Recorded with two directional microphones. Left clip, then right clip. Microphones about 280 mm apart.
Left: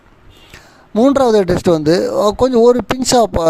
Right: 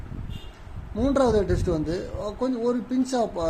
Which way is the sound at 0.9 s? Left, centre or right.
Left.